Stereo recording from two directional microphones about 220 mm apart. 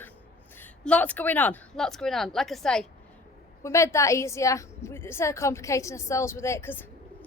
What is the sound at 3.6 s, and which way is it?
A woman's voice, 15° left (ahead or behind).